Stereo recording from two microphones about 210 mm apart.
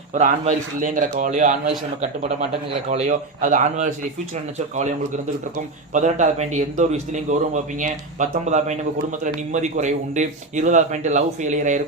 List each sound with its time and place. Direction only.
0.1 s a man's voice: 35° right (ahead or behind)
2.9 s a man's voice: 35° right (ahead or behind)